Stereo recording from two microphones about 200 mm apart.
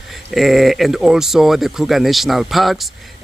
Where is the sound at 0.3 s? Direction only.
Centre (ahead or behind).